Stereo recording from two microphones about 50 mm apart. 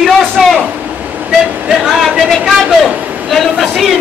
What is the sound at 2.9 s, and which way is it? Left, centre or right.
Vehicle, right.